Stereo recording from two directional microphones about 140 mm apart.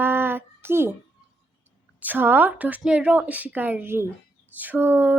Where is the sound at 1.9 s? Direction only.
15° right (ahead or behind).